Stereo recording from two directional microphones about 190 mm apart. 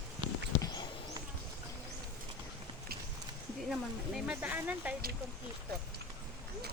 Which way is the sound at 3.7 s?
5° right (ahead or behind).